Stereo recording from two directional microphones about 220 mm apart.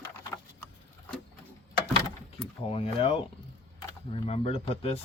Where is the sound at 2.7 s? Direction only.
25° left (ahead or behind).